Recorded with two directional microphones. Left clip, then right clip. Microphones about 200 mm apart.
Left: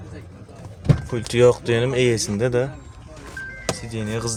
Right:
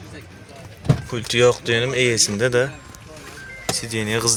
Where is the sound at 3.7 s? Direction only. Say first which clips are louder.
Right 6 dB; 10° right (ahead or behind).